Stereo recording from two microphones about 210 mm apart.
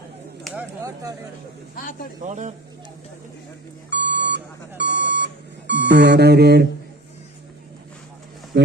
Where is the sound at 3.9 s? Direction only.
55° right (ahead or behind).